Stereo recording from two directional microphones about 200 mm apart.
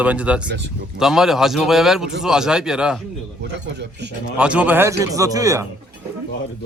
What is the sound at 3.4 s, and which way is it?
Speech, 60° right (ahead or behind).